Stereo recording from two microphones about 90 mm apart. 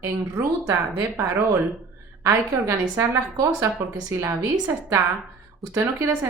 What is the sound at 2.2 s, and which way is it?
A woman's voice, 35° right (ahead or behind).